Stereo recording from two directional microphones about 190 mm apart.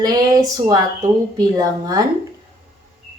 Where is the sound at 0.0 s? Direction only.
20° right (ahead or behind).